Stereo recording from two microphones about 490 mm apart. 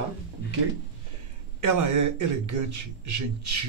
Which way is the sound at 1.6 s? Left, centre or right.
Right.